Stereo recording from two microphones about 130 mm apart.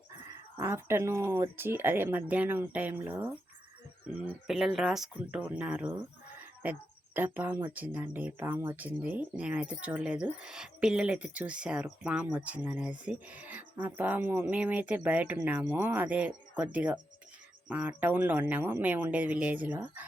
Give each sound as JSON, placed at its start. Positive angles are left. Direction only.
{"t": 0.5, "sound": "speech", "side_deg": -20}
{"t": 4.4, "sound": "speech", "side_deg": 0}